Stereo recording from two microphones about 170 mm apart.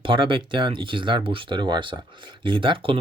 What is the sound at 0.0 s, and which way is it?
Speech, 30° right (ahead or behind).